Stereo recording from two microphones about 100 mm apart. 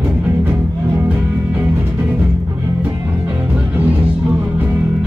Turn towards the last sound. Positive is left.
turn(degrees=-15)  # may be behind; listen again after turning